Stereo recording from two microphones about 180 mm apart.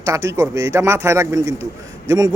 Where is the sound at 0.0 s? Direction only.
15° right (ahead or behind).